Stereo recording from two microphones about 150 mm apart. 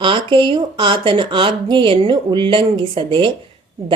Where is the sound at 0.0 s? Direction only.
35° right (ahead or behind).